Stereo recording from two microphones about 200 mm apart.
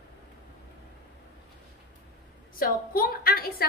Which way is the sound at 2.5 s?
45° left (ahead or behind).